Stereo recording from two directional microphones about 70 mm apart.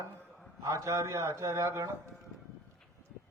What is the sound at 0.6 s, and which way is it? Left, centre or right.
A man's voice, right.